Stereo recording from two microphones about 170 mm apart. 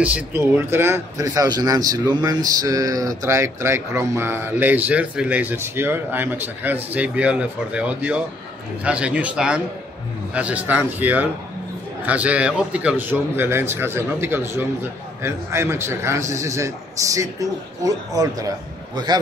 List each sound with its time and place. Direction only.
0.0 s a man's voice: 10° right (ahead or behind)